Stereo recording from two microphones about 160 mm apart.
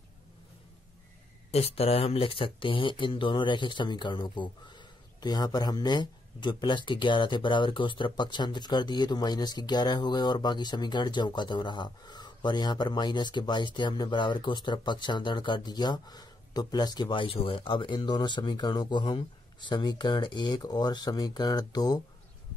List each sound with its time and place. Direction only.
1.5 s speech: 40° left (ahead or behind); by 22.0 s 25° left (ahead or behind)